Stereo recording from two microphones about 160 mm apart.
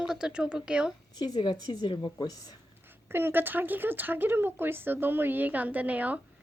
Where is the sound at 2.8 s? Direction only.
15° right (ahead or behind).